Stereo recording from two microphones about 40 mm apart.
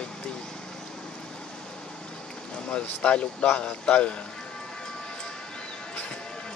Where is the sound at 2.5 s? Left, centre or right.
Left.